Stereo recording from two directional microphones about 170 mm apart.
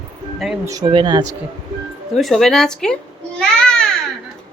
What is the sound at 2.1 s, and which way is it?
A child's voice, centre (ahead or behind).